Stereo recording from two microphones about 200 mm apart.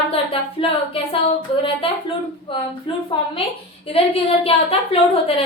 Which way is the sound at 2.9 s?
25° left (ahead or behind).